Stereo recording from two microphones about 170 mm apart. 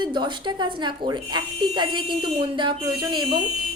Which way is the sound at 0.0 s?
25° right (ahead or behind).